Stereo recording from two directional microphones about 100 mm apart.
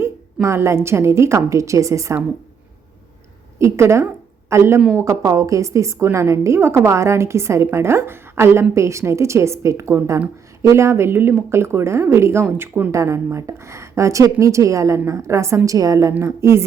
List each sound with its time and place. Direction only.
0.4 s a woman's voice: 30° right (ahead or behind)
3.6 s a woman's voice: 25° right (ahead or behind)
12.9 s a woman's voice: 30° right (ahead or behind)